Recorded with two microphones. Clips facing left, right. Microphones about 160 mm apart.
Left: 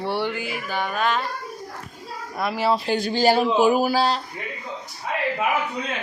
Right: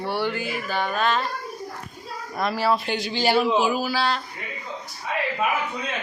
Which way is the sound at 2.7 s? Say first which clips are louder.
Left 2 dB; 35° left (ahead or behind).